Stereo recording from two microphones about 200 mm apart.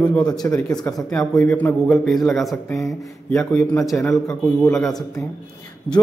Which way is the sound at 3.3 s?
15° left (ahead or behind).